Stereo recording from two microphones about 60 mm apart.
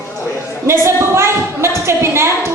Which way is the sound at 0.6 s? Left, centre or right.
Right.